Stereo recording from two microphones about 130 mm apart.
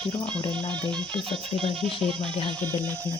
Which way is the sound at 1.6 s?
40° right (ahead or behind).